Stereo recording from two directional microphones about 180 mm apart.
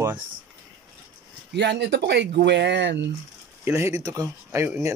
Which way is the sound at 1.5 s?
75° right (ahead or behind).